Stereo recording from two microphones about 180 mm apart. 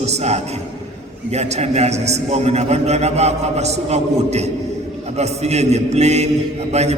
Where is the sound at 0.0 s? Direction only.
35° right (ahead or behind).